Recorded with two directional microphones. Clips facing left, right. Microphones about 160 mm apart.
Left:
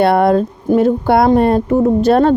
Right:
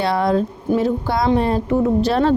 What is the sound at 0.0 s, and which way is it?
Speech, 60° left (ahead or behind).